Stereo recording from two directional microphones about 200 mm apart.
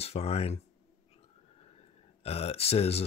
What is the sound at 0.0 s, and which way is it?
Speech, 30° left (ahead or behind).